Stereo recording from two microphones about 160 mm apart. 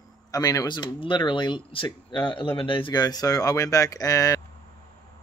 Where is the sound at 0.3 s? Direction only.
20° left (ahead or behind).